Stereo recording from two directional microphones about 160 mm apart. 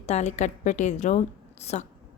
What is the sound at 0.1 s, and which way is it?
Speech, 45° left (ahead or behind).